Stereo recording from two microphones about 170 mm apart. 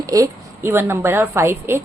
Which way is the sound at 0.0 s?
20° right (ahead or behind).